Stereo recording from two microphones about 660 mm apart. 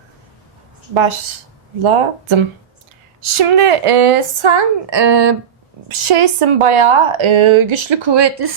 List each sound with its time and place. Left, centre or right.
1.8 s a woman's voice: right